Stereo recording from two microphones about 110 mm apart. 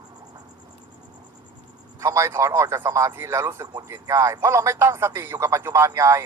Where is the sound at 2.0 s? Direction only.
30° right (ahead or behind).